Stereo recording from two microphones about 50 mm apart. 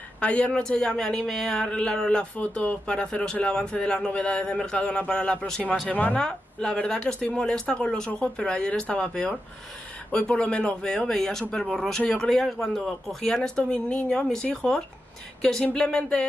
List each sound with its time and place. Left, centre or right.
0.2 s speech: left
2.3 s a man's voice: left
6.1 s speech: centre